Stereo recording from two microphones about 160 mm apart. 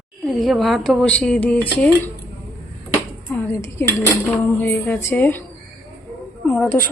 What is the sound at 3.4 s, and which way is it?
A woman's voice, 15° left (ahead or behind).